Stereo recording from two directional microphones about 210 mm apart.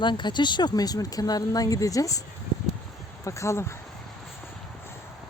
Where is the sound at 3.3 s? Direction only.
15° left (ahead or behind).